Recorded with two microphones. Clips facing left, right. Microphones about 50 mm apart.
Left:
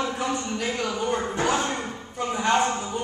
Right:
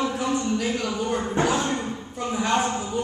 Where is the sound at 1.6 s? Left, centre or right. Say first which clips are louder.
Right 1 dB; left.